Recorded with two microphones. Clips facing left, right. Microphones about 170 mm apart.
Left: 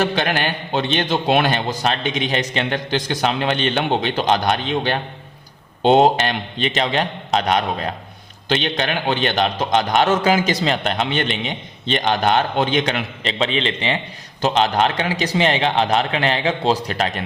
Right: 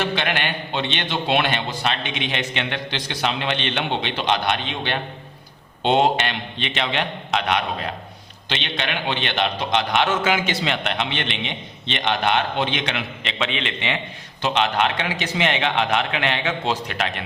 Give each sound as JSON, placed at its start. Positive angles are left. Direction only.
{"t": 0.0, "sound": "a man's voice", "side_deg": 40}